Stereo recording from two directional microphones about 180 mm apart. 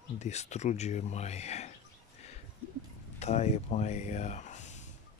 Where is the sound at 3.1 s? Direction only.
35° left (ahead or behind).